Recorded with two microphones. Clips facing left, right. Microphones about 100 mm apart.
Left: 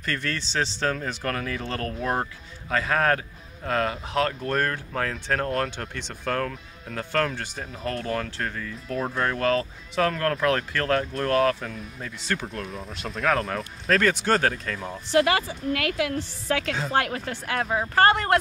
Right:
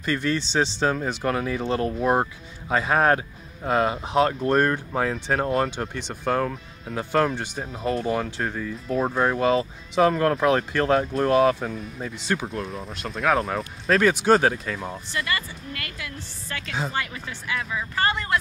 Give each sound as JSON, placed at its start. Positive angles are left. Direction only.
{"t": 0.0, "sound": "speech", "side_deg": -15}
{"t": 12.4, "sound": "speech", "side_deg": 0}
{"t": 15.0, "sound": "a woman's voice", "side_deg": 90}
{"t": 16.9, "sound": "speech", "side_deg": 65}